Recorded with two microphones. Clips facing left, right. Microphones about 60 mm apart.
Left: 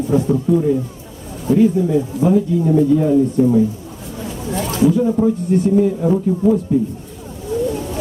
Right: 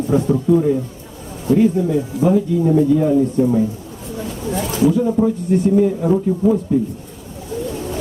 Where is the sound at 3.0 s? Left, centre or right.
Centre.